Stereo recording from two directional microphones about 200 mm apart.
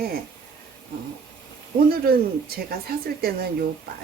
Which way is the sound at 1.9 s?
50° right (ahead or behind).